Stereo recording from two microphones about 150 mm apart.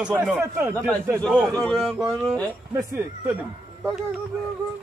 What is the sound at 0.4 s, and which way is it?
Speech, 15° right (ahead or behind).